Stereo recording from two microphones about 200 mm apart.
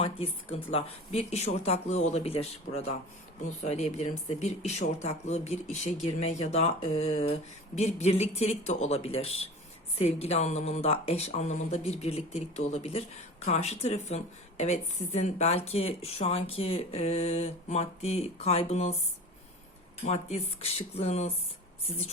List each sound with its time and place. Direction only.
0.0 s speech: 30° left (ahead or behind)
20.1 s speech: 35° left (ahead or behind)